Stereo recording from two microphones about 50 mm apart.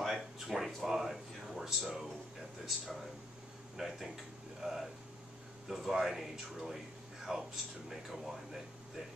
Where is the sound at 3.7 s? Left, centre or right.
Centre.